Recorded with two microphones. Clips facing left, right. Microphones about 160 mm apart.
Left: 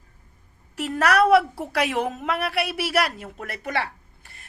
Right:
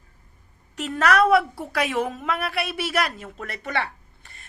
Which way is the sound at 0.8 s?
5° left (ahead or behind).